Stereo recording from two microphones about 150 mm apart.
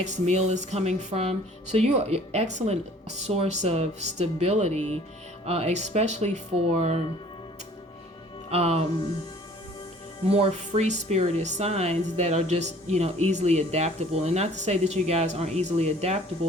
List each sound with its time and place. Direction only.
0.0 s speech: 50° right (ahead or behind)
8.4 s speech: 45° right (ahead or behind)
10.2 s speech: 45° right (ahead or behind)